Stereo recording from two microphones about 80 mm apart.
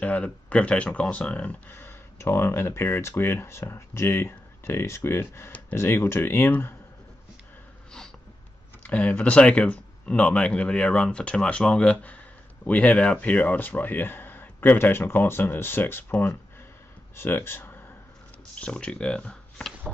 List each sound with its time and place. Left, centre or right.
0.0 s speech: centre
1.8 s speech: left
8.8 s speech: centre
18.5 s speech: centre